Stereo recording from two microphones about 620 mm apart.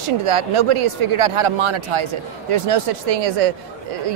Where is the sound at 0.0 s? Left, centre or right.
Right.